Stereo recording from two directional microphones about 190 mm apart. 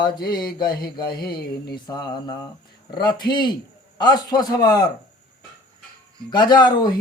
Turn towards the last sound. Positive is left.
turn(degrees=20)  # may be behind; listen again after turning